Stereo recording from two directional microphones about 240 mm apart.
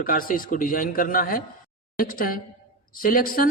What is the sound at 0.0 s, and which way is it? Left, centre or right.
A man's voice, left.